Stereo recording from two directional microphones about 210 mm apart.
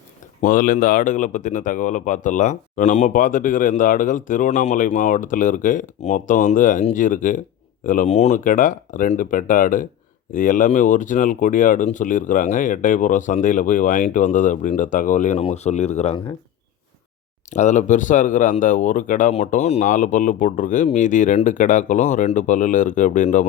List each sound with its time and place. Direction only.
0.4 s speech: 40° left (ahead or behind)
17.5 s speech: 35° left (ahead or behind)